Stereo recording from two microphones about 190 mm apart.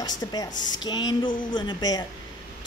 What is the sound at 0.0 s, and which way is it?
Speech, 20° left (ahead or behind).